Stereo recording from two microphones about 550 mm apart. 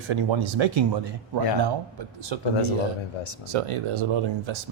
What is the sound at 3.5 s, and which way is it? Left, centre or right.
Speech, right.